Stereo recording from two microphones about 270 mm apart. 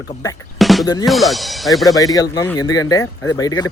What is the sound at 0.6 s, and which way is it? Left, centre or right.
Music, centre.